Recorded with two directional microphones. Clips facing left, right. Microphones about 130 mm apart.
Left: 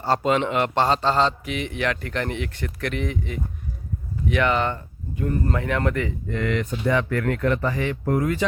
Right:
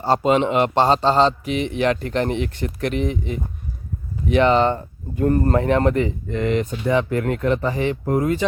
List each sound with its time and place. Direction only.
0.0 s a man's voice: 20° right (ahead or behind)
5.1 s speech: 50° right (ahead or behind)
5.5 s a man's voice: 30° right (ahead or behind)